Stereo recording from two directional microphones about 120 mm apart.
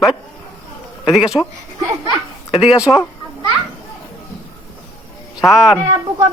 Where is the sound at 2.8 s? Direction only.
25° left (ahead or behind).